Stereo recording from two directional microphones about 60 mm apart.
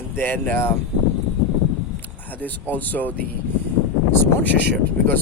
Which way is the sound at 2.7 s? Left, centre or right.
Left.